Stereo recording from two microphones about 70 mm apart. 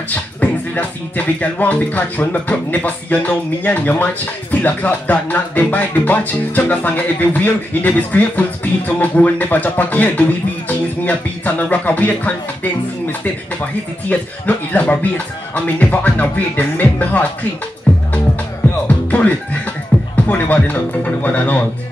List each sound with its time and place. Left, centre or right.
0.1 s speech: left
14.0 s speech: left
17.9 s music: left
18.9 s speech: left
19.9 s beatboxing: centre
20.2 s speech: left